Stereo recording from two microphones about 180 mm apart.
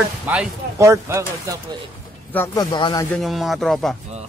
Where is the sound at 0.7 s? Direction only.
15° right (ahead or behind).